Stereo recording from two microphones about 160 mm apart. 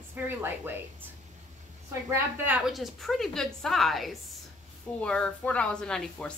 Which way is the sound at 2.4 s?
5° right (ahead or behind).